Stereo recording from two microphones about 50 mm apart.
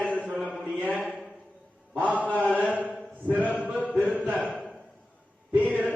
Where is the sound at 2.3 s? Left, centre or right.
Left.